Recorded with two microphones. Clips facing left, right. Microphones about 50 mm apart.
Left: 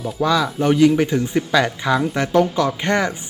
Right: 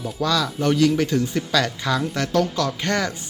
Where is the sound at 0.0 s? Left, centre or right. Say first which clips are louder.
Left 4 dB; centre.